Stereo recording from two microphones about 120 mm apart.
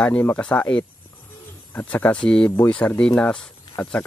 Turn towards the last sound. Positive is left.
turn(degrees=5)  # may be behind; listen again after turning